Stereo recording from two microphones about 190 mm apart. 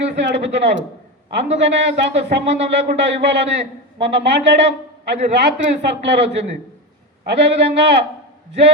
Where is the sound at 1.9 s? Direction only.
35° right (ahead or behind).